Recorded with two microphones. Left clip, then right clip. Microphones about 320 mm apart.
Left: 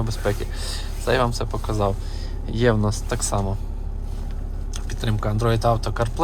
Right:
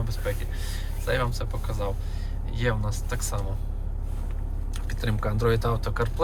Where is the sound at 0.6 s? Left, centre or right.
Centre.